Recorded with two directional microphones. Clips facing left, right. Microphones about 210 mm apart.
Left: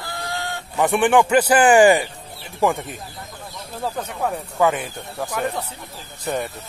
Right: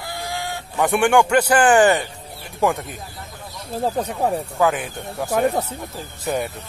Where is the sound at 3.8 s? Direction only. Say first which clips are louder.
Right 4 dB; 35° right (ahead or behind).